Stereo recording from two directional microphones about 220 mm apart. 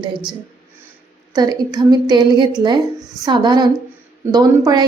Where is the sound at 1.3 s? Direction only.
15° right (ahead or behind).